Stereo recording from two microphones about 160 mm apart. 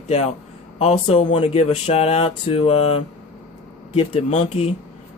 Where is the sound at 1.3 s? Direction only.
40° left (ahead or behind).